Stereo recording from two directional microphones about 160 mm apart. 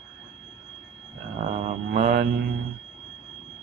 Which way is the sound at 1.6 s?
55° right (ahead or behind).